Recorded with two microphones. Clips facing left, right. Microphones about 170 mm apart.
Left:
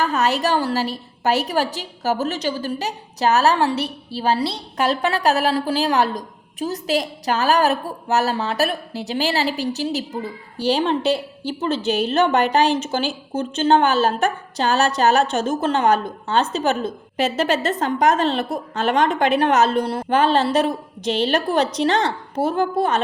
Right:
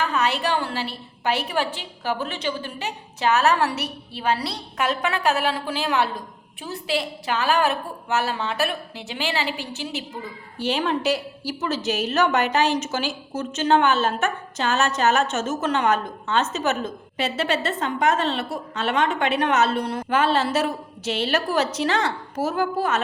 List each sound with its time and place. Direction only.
0.0 s a woman's voice: 40° left (ahead or behind)